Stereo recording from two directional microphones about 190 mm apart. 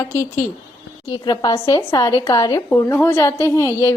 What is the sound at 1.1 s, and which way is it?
A woman's voice, 20° left (ahead or behind).